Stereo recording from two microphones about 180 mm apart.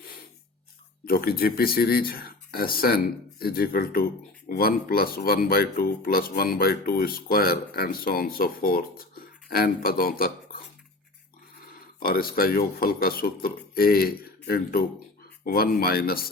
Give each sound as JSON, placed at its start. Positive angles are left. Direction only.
{"t": 1.0, "sound": "speech", "side_deg": 55}
{"t": 11.9, "sound": "speech", "side_deg": 55}